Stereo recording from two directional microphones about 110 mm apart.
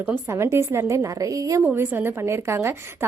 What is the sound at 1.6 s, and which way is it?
A woman's voice, 20° right (ahead or behind).